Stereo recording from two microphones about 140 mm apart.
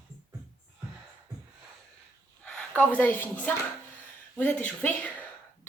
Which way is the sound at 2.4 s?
5° left (ahead or behind).